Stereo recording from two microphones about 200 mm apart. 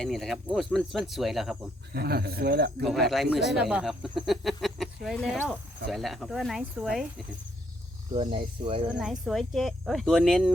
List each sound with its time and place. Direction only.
0.0 s speech: centre (ahead or behind)
1.9 s speech: 50° right (ahead or behind)
3.1 s speech: centre (ahead or behind)
8.1 s speech: 25° right (ahead or behind)
8.9 s speech: centre (ahead or behind)